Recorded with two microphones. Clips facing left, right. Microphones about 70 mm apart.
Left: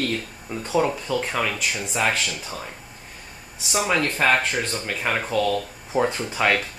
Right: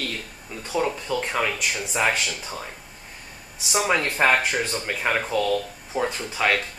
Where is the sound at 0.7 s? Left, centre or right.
Centre.